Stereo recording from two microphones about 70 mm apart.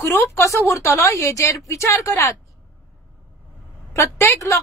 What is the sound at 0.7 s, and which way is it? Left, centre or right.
A woman's voice, left.